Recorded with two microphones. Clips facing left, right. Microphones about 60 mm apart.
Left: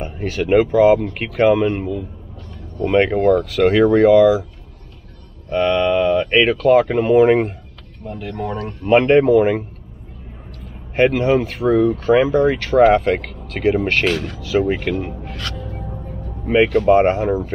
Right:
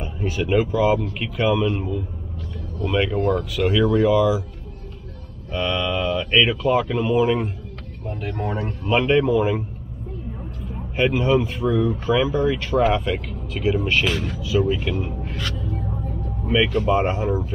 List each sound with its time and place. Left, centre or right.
0.4 s speech: left
2.8 s speech: left
5.5 s speech: left
6.9 s speech: left
8.1 s speech: right
8.8 s speech: left
11.0 s speech: left
11.4 s speech: left
11.8 s speech: left
14.5 s speech: left
15.5 s music: left
16.4 s speech: left